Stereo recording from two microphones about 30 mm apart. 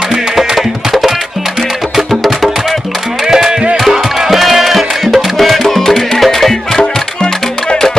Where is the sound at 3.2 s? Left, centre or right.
Centre.